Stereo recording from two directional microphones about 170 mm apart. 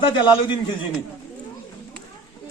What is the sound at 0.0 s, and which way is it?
Speech, 30° left (ahead or behind).